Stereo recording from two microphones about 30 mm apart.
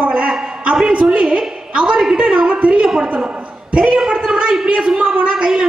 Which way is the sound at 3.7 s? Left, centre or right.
Right.